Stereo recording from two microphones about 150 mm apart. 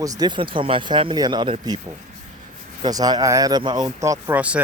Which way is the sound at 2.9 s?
25° right (ahead or behind).